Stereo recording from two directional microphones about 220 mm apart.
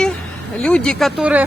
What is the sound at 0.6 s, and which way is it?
Speech, 5° left (ahead or behind).